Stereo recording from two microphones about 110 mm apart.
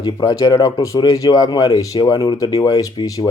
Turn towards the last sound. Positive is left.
turn(degrees=35)  # may be behind; listen again after turning